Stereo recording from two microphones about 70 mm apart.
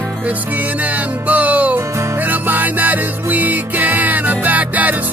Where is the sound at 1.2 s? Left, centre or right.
Right.